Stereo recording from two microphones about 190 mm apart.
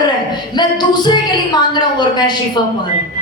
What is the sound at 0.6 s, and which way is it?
Music, 25° left (ahead or behind).